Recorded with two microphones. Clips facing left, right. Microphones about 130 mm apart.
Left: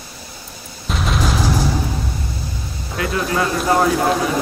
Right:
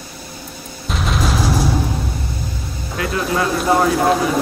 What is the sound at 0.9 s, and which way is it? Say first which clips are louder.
Music: even; centre (ahead or behind).